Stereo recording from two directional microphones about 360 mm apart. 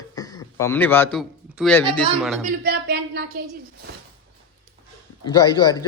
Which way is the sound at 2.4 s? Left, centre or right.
Right.